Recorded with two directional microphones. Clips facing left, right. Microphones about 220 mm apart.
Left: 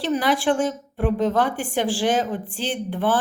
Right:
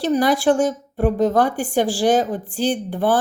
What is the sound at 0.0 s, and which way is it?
Speech, 40° right (ahead or behind).